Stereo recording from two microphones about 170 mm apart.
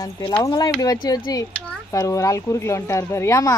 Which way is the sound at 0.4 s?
20° left (ahead or behind).